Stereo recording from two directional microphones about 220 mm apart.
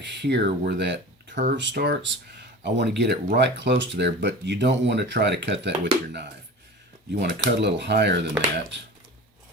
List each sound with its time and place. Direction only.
0.0 s speech: 50° right (ahead or behind)